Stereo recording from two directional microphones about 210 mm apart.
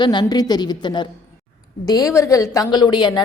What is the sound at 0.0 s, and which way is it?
A woman's voice, 20° left (ahead or behind).